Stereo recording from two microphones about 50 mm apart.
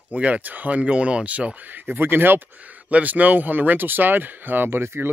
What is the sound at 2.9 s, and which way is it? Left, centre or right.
Speech, right.